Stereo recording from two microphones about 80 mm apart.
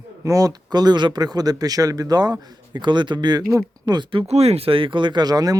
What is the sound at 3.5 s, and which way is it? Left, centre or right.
Speech, right.